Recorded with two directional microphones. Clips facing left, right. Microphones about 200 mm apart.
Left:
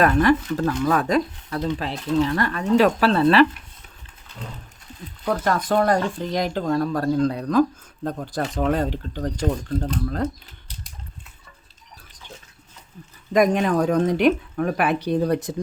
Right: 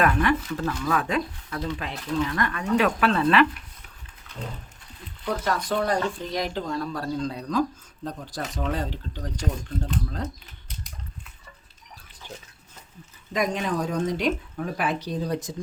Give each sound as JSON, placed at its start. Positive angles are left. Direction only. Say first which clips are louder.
{"t": 0.0, "sound": "speech", "louder": "left 5 dB", "side_deg": 40}
{"t": 5.2, "sound": "a woman's voice", "louder": "left 4 dB", "side_deg": 50}
{"t": 13.3, "sound": "a woman's voice", "louder": "left 8 dB", "side_deg": 50}